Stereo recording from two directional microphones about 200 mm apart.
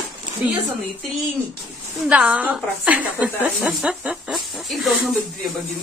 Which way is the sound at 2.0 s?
5° right (ahead or behind).